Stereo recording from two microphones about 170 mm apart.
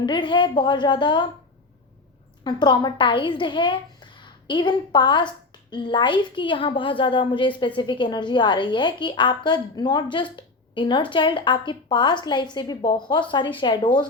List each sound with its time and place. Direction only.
0.0 s a woman's voice: 30° left (ahead or behind)
2.4 s a woman's voice: 25° left (ahead or behind)